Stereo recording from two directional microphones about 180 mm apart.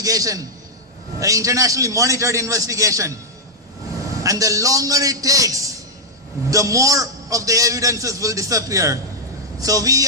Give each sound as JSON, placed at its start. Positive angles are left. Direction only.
{"t": 0.0, "sound": "a man's voice", "side_deg": -20}
{"t": 4.2, "sound": "a man's voice", "side_deg": -20}